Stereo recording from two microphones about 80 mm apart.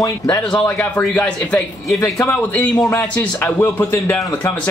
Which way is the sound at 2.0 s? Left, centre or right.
Left.